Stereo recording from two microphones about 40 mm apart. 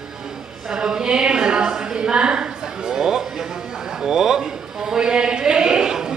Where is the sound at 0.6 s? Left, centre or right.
Centre.